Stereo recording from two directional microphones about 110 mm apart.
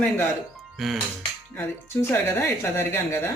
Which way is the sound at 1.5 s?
20° left (ahead or behind).